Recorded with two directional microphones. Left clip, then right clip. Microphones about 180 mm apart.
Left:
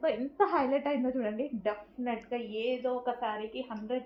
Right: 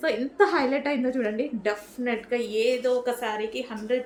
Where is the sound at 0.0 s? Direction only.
35° right (ahead or behind).